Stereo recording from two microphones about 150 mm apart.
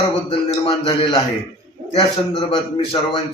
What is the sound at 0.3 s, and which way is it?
Speech, 35° left (ahead or behind).